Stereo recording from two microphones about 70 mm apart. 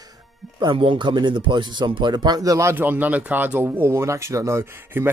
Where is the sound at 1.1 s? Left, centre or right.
Right.